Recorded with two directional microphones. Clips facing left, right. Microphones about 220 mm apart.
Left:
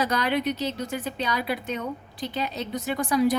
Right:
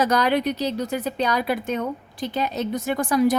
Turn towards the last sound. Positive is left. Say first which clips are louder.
# right 3 dB
turn(degrees=-50)  # may be behind; listen again after turning